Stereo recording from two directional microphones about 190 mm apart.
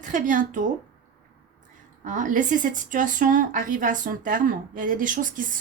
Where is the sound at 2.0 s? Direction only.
40° right (ahead or behind).